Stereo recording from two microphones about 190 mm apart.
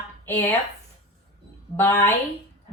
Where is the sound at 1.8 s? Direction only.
10° left (ahead or behind).